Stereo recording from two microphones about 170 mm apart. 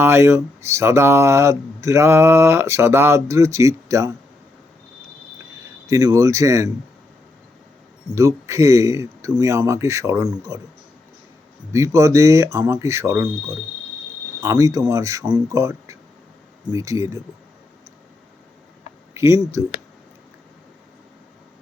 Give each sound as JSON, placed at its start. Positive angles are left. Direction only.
{"t": 0.0, "sound": "speech", "side_deg": -15}
{"t": 5.9, "sound": "speech", "side_deg": -20}
{"t": 8.1, "sound": "speech", "side_deg": -15}
{"t": 11.7, "sound": "speech", "side_deg": -15}
{"t": 19.1, "sound": "speech", "side_deg": -15}